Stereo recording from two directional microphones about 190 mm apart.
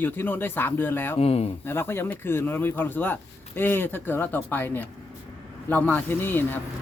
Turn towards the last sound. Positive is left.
turn(degrees=10)  # may be behind; listen again after turning